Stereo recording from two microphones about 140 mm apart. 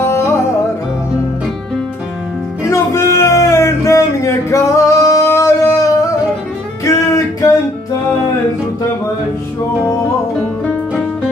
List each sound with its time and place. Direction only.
0.0 s music: 20° left (ahead or behind)
2.6 s music: 20° left (ahead or behind)